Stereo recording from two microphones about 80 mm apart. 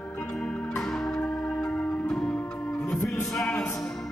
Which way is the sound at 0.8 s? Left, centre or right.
Centre.